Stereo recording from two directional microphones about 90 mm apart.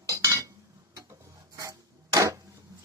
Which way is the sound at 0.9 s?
40° right (ahead or behind).